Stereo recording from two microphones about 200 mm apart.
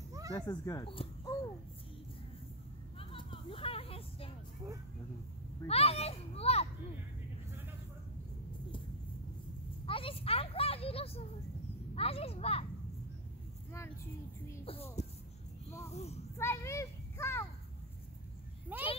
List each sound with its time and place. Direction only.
0.3 s speech: 20° left (ahead or behind)
3.0 s a sound: 25° left (ahead or behind)
5.7 s children playing: 30° left (ahead or behind)
9.8 s speech: 25° left (ahead or behind)
14.6 s a child's voice: 30° left (ahead or behind)
16.3 s a sound: 15° left (ahead or behind)
18.7 s a child's voice: 10° right (ahead or behind)